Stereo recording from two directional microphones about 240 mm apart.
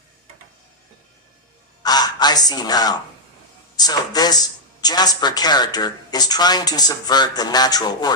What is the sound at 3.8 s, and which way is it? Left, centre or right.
Speech, centre.